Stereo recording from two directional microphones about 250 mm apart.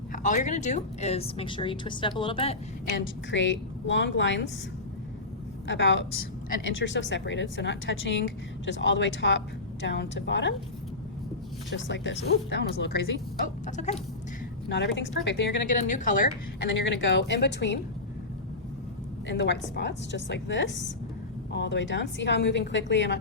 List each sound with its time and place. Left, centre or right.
0.1 s a woman's voice: left
3.0 s speech: left
5.6 s speech: left
11.7 s speech: left
13.7 s a woman's voice: left
14.7 s speech: left
15.6 s a woman's voice: left
16.7 s speech: left
19.3 s speech: left